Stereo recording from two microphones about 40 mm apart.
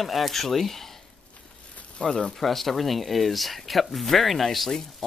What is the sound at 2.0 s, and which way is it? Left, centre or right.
Speech, left.